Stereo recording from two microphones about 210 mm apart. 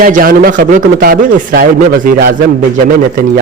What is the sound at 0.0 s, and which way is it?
A woman's voice, 40° right (ahead or behind).